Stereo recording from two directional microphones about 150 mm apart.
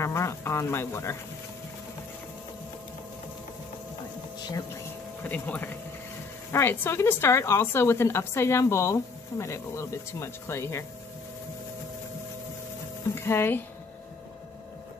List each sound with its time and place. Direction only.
0.0 s a woman's voice: 20° left (ahead or behind)
5.2 s a woman's voice: 10° left (ahead or behind)
13.1 s speech: 15° left (ahead or behind)